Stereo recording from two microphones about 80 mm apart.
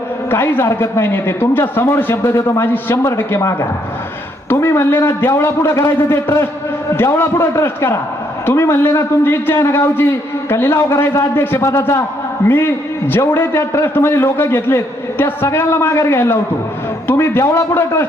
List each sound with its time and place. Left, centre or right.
0.3 s a man's voice: left